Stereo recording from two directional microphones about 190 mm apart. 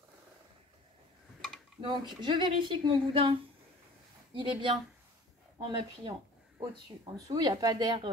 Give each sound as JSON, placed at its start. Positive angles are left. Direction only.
{"t": 1.8, "sound": "speech", "side_deg": -25}